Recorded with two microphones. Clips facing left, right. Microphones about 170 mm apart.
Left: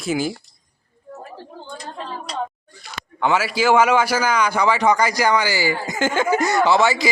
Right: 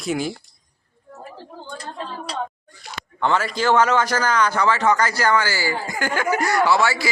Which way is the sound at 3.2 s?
10° left (ahead or behind).